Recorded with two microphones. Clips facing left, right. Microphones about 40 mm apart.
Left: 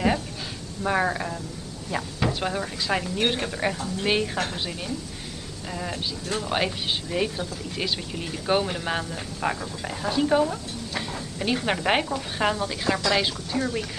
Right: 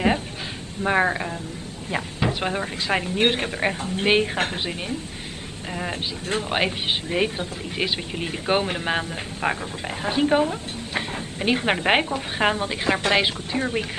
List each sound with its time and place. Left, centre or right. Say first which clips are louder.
0.8 s speech: right 3 dB; right